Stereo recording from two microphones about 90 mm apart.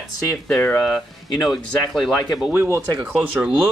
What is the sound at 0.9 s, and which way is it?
Speech, centre (ahead or behind).